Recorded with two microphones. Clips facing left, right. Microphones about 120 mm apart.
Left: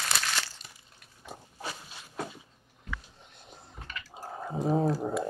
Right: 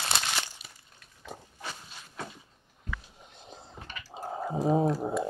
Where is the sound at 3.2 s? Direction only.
20° right (ahead or behind).